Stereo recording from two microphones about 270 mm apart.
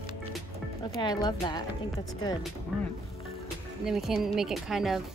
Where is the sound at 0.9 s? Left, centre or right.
Centre.